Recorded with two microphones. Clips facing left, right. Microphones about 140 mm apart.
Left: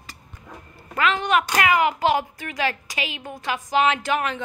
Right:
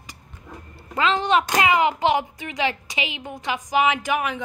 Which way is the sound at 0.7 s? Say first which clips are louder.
Right 1 dB; 30° right (ahead or behind).